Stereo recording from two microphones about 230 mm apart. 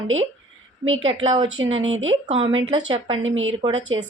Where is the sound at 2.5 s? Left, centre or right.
Right.